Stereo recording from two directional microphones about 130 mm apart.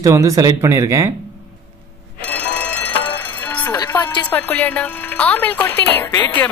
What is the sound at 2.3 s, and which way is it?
Train, 10° left (ahead or behind).